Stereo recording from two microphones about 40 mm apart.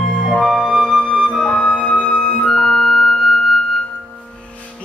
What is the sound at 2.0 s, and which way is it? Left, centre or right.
Flute, centre.